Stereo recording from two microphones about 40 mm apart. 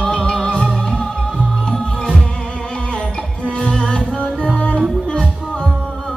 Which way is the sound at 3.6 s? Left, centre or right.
Left.